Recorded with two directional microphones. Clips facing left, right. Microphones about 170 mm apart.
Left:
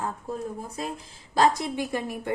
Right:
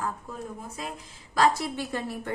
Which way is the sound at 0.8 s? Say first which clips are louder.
Left 4 dB; 35° left (ahead or behind).